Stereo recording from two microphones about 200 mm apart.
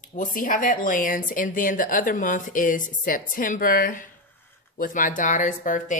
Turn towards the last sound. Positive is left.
turn(degrees=40)  # may be behind; listen again after turning